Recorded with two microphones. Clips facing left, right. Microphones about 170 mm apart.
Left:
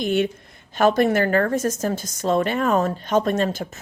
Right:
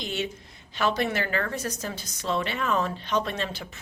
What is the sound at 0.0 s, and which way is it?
A woman's voice, 55° left (ahead or behind).